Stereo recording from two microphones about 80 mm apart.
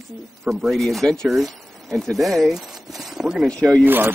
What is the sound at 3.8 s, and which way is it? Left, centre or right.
Speech, right.